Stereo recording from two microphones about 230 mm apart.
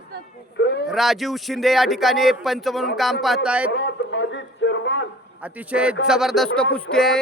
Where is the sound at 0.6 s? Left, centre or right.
Left.